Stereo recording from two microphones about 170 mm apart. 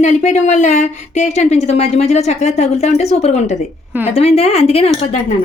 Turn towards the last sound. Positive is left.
turn(degrees=40)  # may be behind; listen again after turning